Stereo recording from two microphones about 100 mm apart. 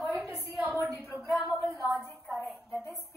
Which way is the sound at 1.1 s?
Centre (ahead or behind).